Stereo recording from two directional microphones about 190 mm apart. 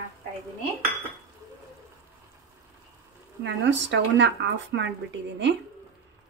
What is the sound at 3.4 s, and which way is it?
Speech, 70° right (ahead or behind).